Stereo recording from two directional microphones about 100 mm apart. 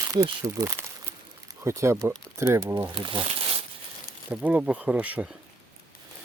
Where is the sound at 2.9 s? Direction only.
55° right (ahead or behind).